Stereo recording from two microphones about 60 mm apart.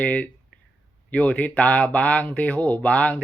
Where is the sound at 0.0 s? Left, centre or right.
Left.